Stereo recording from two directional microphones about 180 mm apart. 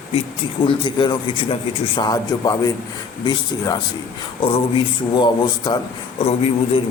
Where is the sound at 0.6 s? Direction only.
25° left (ahead or behind).